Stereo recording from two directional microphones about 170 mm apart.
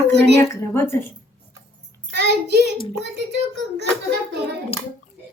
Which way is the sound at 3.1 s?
90° right.